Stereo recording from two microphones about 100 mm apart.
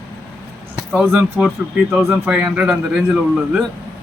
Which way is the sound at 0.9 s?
10° right (ahead or behind).